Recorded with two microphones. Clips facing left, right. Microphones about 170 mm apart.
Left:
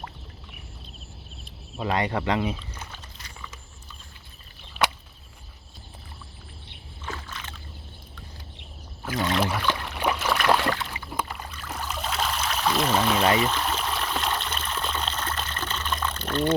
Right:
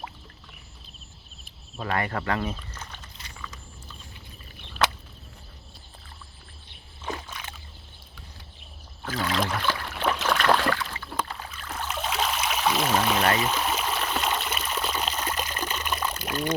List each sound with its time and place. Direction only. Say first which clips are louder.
1.7 s speech: left 3 dB; 15° left (ahead or behind)
7.0 s rowboat: right 2 dB; 15° right (ahead or behind)
9.0 s rowboat: left 2 dB; 20° left (ahead or behind)
9.4 s a sound: left 2 dB; 10° left (ahead or behind)
9.7 s boat: left 1 dB; 15° left (ahead or behind)
11.3 s boat: left 1 dB; 5° right (ahead or behind)
11.7 s a sound: right 1 dB; centre (ahead or behind)
13.4 s trickle: left 1 dB; 10° right (ahead or behind)